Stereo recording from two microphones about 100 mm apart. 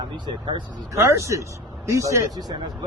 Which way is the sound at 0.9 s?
30° right (ahead or behind).